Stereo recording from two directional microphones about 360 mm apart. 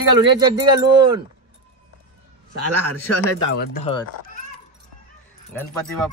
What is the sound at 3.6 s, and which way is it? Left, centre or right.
Speech, left.